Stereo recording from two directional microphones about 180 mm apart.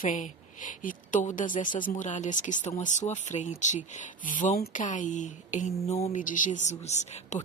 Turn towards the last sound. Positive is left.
turn(degrees=40)  # may be behind; listen again after turning